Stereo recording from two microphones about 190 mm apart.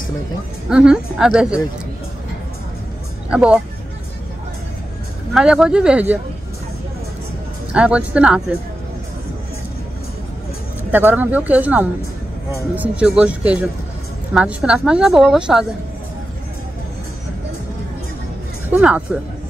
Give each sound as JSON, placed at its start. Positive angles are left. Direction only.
{"t": 0.7, "sound": "a woman's voice", "side_deg": -5}
{"t": 3.3, "sound": "a woman's voice", "side_deg": -5}
{"t": 5.3, "sound": "a woman's voice", "side_deg": -5}
{"t": 7.7, "sound": "a woman's voice", "side_deg": -5}
{"t": 10.9, "sound": "a woman's voice", "side_deg": -10}
{"t": 18.7, "sound": "speech", "side_deg": -5}